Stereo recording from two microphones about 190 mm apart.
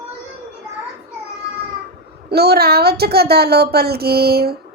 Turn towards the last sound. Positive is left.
turn(degrees=-55)  # may be behind; listen again after turning